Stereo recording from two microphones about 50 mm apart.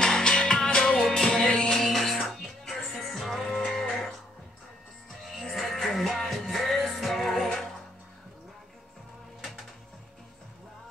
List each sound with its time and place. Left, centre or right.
0.0 s music: centre
5.3 s music: centre